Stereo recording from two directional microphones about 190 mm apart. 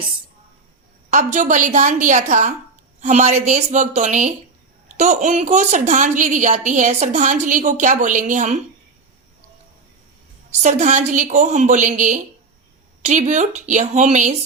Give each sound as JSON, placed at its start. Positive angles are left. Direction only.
{"t": 1.1, "sound": "a woman's voice", "side_deg": -40}
{"t": 10.6, "sound": "a woman's voice", "side_deg": -40}